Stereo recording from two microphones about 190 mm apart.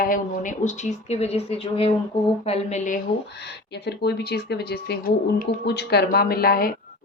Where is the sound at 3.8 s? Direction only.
60° left (ahead or behind).